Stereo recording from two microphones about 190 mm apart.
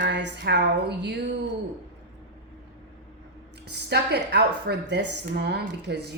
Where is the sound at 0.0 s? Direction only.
65° right (ahead or behind).